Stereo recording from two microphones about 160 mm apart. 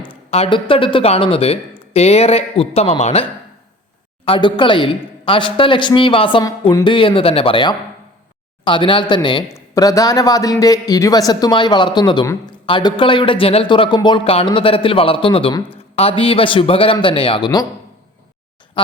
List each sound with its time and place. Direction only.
0.0 s a man's voice: 35° left (ahead or behind)
4.3 s a man's voice: 30° left (ahead or behind)